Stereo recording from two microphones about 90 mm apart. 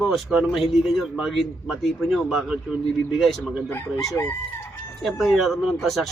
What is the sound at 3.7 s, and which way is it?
Speech, 25° left (ahead or behind).